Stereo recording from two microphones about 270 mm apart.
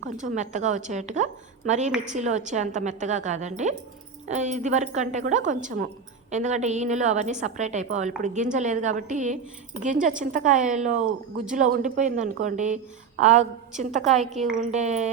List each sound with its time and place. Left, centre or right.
0.2 s a woman's voice: right